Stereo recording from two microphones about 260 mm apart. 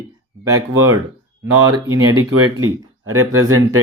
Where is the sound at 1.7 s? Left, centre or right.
Right.